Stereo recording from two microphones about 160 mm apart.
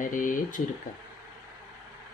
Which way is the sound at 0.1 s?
55° left (ahead or behind).